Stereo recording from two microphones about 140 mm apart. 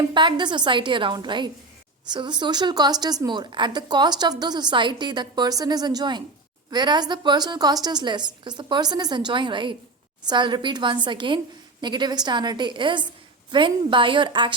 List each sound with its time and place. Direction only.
0.1 s a woman's voice: 35° right (ahead or behind)